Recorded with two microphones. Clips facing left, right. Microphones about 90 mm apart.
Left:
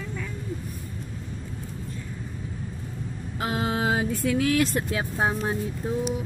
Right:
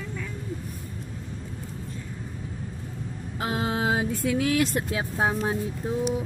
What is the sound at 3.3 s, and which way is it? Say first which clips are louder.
Speech: left 1 dB; 20° right (ahead or behind).